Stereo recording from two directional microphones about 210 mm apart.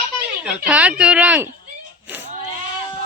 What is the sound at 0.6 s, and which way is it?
Speech, 5° right (ahead or behind).